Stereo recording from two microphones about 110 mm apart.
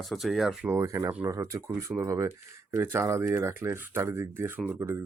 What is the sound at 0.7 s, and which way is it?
Speech, 30° right (ahead or behind).